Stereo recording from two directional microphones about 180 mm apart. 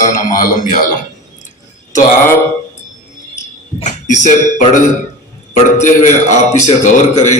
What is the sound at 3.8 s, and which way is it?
A man's voice, 45° left (ahead or behind).